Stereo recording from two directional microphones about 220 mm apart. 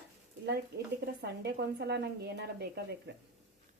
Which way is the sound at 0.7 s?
45° right (ahead or behind).